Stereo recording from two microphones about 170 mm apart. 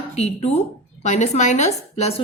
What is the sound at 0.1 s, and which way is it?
A woman's voice, 40° left (ahead or behind).